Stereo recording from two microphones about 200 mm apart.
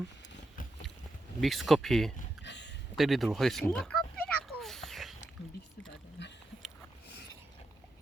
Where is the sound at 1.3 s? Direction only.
Centre (ahead or behind).